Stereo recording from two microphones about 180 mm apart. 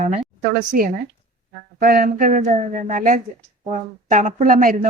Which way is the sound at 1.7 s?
55° right (ahead or behind).